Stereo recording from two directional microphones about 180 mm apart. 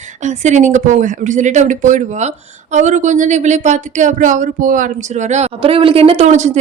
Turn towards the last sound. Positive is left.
turn(degrees=-40)  # may be behind; listen again after turning